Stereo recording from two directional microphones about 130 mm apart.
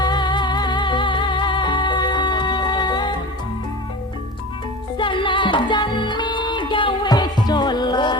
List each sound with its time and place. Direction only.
0.0 s music: 35° left (ahead or behind)
4.9 s music: 40° left (ahead or behind)